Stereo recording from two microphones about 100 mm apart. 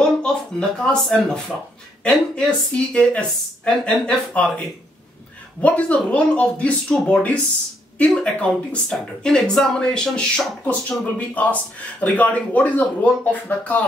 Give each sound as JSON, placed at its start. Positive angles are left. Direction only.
{"t": 0.2, "sound": "speech", "side_deg": 5}